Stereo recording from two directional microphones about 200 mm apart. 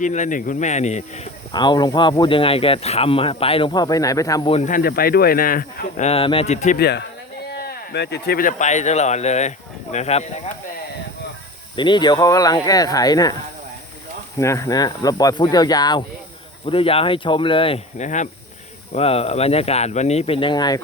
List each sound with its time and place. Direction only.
0.0 s speech: 40° left (ahead or behind)
1.5 s speech: 20° left (ahead or behind)
4.5 s speech: 40° left (ahead or behind)
6.1 s speech: 30° left (ahead or behind)
6.7 s speech: 55° left (ahead or behind); by 10.5 s 30° left (ahead or behind)
11.8 s speech: 20° left (ahead or behind)
14.3 s speech: 15° left (ahead or behind)